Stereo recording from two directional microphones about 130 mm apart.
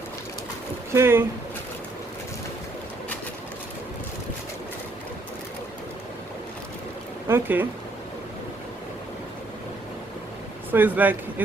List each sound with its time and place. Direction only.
0.9 s speech: 20° right (ahead or behind)
7.3 s speech: 15° right (ahead or behind)
10.7 s speech: 15° right (ahead or behind)